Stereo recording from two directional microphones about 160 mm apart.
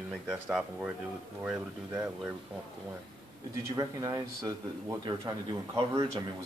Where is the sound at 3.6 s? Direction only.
20° right (ahead or behind).